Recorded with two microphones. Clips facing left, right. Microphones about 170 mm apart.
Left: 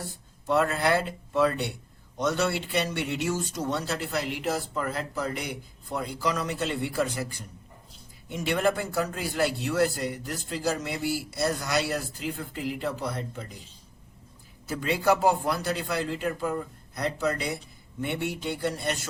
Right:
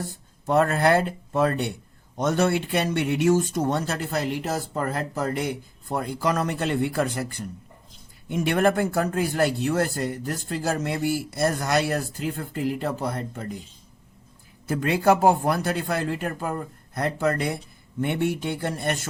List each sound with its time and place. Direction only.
0.4 s speech: 50° right (ahead or behind)
14.7 s speech: 55° right (ahead or behind)